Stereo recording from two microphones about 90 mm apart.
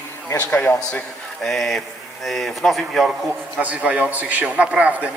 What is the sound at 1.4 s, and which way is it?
A man's voice, centre (ahead or behind).